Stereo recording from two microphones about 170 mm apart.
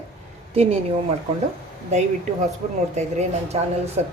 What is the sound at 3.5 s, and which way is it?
Speech, 35° right (ahead or behind).